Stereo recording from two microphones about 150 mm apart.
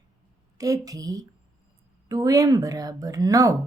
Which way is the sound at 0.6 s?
25° right (ahead or behind).